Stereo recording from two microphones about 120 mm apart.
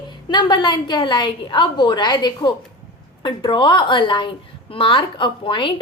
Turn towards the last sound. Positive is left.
turn(degrees=45)  # may be behind; listen again after turning